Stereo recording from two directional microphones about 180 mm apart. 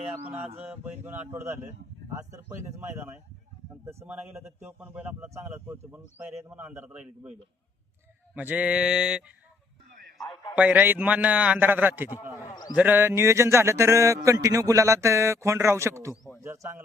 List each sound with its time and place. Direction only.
0.6 s a man's voice: 10° right (ahead or behind)
8.4 s mantra: 10° right (ahead or behind)
10.2 s a sound: 25° left (ahead or behind)
10.5 s a man's voice: 10° right (ahead or behind)
12.4 s a man's voice: 20° left (ahead or behind)
12.7 s a man's voice: 10° right (ahead or behind)